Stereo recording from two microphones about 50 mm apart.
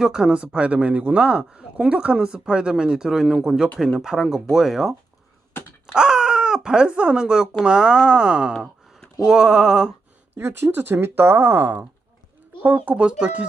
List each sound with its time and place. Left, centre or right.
0.0 s speech: centre
8.5 s a sound: centre
9.2 s speech: centre
10.3 s speech: right
10.7 s speech: right
13.0 s speech: right